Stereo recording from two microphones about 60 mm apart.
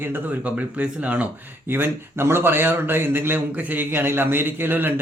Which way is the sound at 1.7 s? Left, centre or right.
Right.